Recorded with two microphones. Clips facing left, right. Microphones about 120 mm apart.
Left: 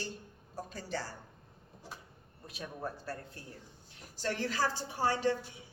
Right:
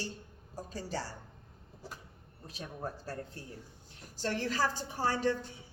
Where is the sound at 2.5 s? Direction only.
40° right (ahead or behind).